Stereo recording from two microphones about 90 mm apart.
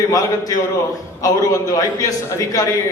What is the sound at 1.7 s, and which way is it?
Speech, 40° left (ahead or behind).